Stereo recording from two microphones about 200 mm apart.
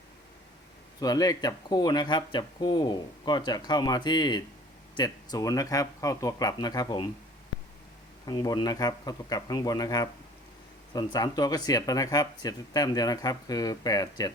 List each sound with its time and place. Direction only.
0.9 s speech: 20° left (ahead or behind)
8.3 s speech: 20° left (ahead or behind)